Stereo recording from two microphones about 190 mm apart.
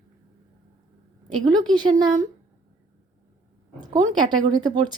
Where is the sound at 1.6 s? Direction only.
25° right (ahead or behind).